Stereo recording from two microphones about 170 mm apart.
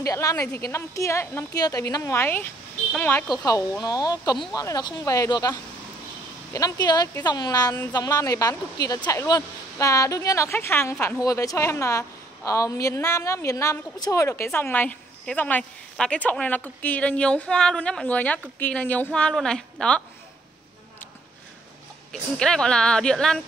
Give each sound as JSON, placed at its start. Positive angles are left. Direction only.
{"t": 0.0, "sound": "a woman's voice", "side_deg": 20}
{"t": 3.8, "sound": "a woman's voice", "side_deg": 25}
{"t": 22.1, "sound": "speech", "side_deg": 5}